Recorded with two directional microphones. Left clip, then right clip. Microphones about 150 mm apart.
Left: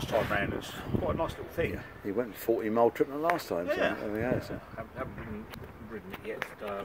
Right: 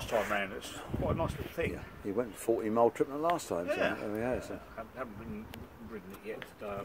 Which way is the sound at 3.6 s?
15° left (ahead or behind).